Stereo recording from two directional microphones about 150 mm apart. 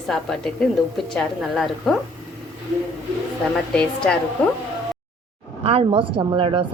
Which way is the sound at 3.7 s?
5° left (ahead or behind).